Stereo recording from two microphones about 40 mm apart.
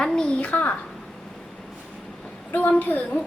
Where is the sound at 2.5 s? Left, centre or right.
Left.